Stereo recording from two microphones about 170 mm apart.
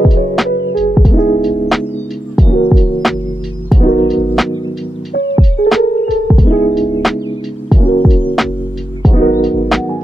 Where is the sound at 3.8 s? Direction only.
55° left (ahead or behind).